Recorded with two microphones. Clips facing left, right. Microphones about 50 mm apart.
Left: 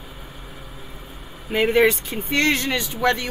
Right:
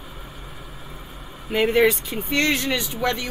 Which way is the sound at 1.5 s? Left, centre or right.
Centre.